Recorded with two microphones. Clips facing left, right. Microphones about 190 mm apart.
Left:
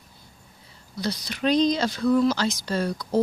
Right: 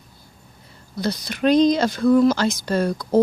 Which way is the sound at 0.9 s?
50° right (ahead or behind).